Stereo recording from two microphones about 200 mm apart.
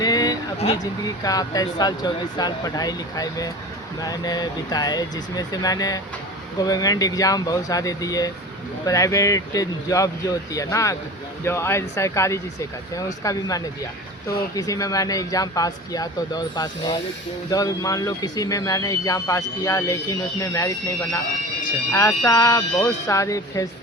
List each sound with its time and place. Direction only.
0.0 s a sound: 20° left (ahead or behind)
0.8 s speech: 20° left (ahead or behind)
21.9 s speech: 15° left (ahead or behind)